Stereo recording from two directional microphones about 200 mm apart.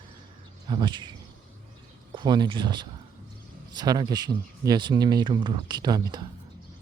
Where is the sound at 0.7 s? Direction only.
20° right (ahead or behind).